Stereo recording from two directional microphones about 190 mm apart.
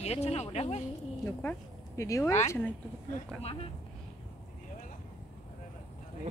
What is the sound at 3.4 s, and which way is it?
Speech, 30° left (ahead or behind).